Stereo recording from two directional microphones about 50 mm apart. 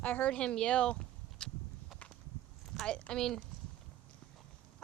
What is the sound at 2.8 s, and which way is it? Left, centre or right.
Speech, left.